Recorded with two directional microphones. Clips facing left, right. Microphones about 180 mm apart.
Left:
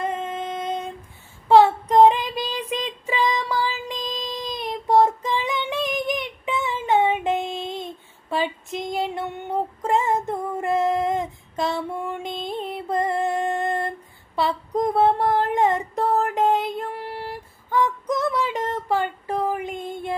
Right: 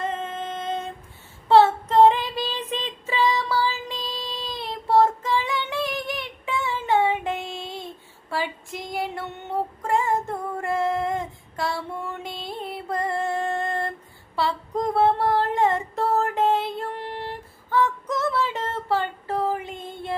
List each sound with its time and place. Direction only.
0.0 s music: 15° left (ahead or behind)
1.5 s child singing: 15° left (ahead or behind)
9.8 s female singing: 20° left (ahead or behind)
14.3 s a sound: 20° left (ahead or behind)